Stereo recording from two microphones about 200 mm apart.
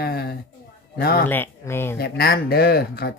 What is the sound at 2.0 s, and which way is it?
Speech, 50° left (ahead or behind).